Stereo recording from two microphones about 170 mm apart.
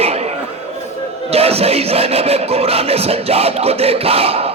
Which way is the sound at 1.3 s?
35° right (ahead or behind).